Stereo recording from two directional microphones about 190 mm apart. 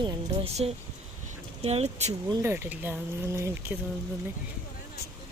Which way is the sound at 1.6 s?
35° right (ahead or behind).